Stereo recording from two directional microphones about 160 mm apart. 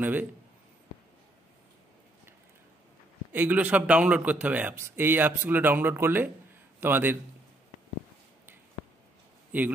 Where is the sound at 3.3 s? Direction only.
10° right (ahead or behind).